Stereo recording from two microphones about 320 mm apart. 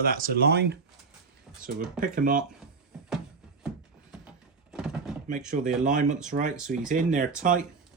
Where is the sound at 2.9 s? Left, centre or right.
Centre.